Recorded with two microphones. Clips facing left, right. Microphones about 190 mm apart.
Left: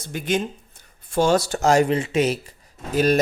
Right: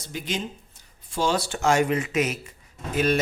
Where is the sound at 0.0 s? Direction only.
55° left (ahead or behind).